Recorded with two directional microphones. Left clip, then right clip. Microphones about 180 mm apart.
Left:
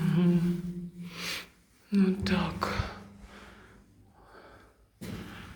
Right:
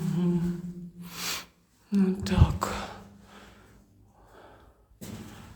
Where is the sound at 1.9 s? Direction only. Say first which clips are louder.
Even; 35° right (ahead or behind).